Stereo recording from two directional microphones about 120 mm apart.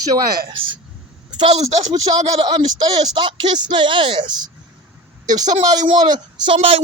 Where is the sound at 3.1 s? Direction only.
40° right (ahead or behind).